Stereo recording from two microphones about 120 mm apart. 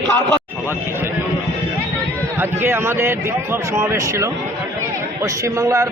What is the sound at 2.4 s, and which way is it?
Speech, 20° right (ahead or behind).